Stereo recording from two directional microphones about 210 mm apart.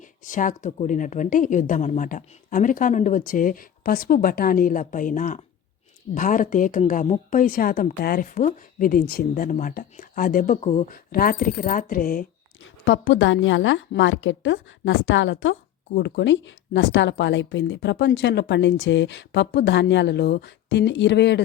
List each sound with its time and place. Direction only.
0.3 s speech: 35° left (ahead or behind)
10.9 s speech: 45° left (ahead or behind)
12.8 s a woman's voice: 60° left (ahead or behind)